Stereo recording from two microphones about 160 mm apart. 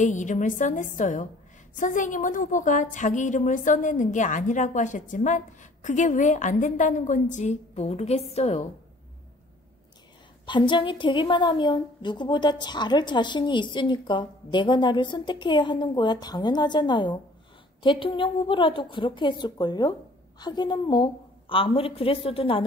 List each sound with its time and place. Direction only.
0.0 s a woman's voice: 50° left (ahead or behind)
10.4 s a woman's voice: 30° left (ahead or behind)